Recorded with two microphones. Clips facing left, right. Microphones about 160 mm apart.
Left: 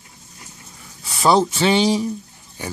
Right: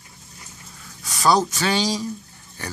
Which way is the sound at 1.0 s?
25° left (ahead or behind).